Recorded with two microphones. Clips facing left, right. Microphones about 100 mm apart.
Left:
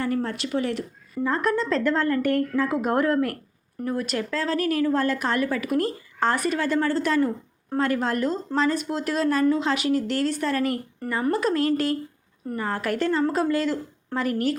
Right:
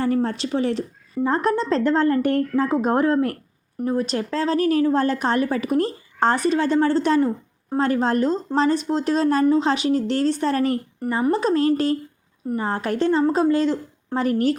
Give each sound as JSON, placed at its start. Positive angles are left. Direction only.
{"t": 0.0, "sound": "speech", "side_deg": -30}
{"t": 11.0, "sound": "speech", "side_deg": -20}